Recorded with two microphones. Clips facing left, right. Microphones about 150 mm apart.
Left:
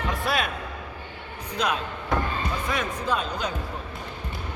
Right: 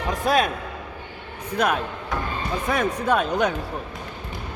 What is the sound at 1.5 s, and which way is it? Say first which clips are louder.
Speech: right 4 dB; 55° right (ahead or behind).